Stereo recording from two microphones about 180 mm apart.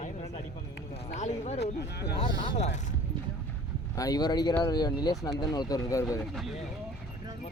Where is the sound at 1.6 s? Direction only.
70° left (ahead or behind).